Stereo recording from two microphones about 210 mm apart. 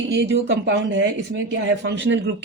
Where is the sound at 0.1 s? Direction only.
55° right (ahead or behind).